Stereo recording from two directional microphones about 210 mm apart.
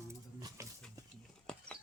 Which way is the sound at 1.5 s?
5° left (ahead or behind).